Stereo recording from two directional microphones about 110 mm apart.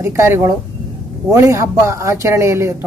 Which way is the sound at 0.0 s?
25° right (ahead or behind).